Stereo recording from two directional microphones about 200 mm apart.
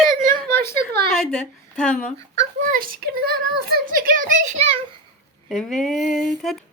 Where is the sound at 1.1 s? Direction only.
Centre (ahead or behind).